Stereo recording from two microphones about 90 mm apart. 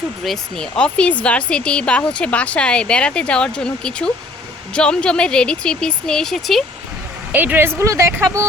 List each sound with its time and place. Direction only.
0.3 s speech: 10° left (ahead or behind)
7.3 s a woman's voice: 20° right (ahead or behind)